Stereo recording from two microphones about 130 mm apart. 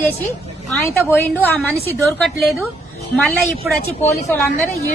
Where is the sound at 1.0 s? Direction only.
15° left (ahead or behind).